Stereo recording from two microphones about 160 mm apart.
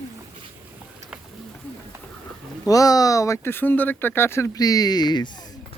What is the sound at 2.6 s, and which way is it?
Speech, 20° left (ahead or behind).